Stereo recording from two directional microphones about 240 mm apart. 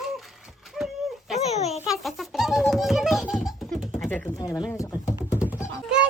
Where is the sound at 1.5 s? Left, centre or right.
Left.